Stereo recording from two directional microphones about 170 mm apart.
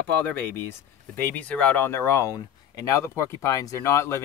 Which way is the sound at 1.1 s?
10° left (ahead or behind).